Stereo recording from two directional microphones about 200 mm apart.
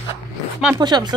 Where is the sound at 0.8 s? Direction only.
20° right (ahead or behind).